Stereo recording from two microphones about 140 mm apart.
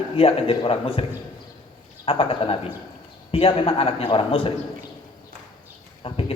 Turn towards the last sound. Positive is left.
turn(degrees=40)  # may be behind; listen again after turning